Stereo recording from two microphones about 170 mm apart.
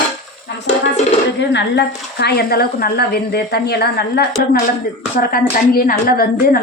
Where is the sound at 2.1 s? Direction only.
75° left (ahead or behind).